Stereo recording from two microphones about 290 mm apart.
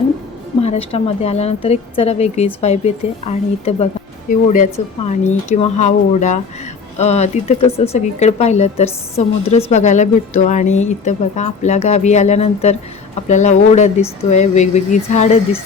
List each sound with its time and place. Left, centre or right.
0.6 s speech: left